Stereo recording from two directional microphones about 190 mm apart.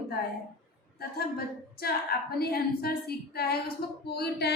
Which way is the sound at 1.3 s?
55° left (ahead or behind).